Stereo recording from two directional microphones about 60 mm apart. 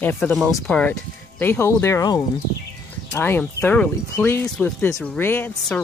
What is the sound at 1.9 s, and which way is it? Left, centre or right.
Speech, left.